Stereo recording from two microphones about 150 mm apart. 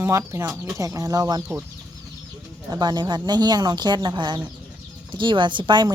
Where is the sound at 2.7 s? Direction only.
25° right (ahead or behind).